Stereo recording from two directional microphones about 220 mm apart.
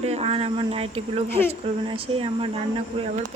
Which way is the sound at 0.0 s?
30° right (ahead or behind).